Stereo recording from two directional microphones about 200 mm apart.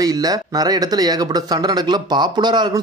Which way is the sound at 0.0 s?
20° right (ahead or behind).